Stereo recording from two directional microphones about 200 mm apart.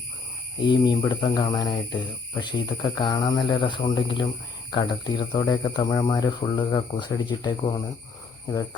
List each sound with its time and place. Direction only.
0.7 s speech: 20° left (ahead or behind)